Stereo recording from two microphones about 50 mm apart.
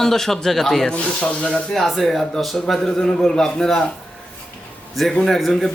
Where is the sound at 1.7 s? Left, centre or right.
Centre.